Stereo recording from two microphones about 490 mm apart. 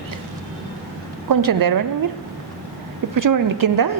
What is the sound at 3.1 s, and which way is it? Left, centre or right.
Speech, right.